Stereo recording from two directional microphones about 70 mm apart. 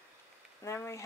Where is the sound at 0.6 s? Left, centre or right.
Left.